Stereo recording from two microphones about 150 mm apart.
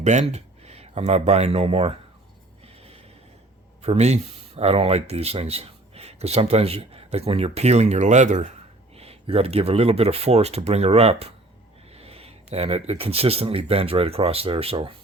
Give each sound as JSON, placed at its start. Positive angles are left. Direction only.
{"t": 0.0, "sound": "speech", "side_deg": -50}
{"t": 3.8, "sound": "speech", "side_deg": -45}
{"t": 9.0, "sound": "speech", "side_deg": -40}